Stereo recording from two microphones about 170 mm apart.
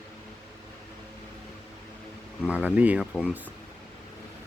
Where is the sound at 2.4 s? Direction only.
10° right (ahead or behind).